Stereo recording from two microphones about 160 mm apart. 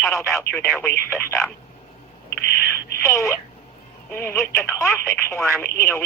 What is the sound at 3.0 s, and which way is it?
Speech, 15° left (ahead or behind).